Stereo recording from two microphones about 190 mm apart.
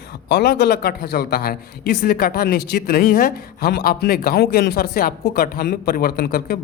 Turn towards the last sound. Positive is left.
turn(degrees=55)  # may be behind; listen again after turning